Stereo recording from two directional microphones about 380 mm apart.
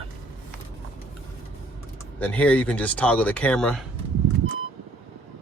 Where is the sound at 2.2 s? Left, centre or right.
Centre.